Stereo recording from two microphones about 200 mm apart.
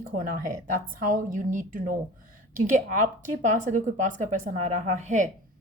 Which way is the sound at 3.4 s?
40° right (ahead or behind).